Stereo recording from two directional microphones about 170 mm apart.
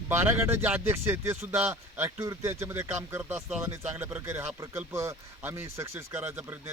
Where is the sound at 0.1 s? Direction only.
15° right (ahead or behind).